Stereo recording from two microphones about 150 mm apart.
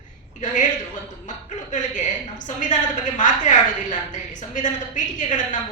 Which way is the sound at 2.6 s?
55° left (ahead or behind).